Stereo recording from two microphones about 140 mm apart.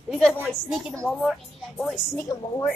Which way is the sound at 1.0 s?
Centre (ahead or behind).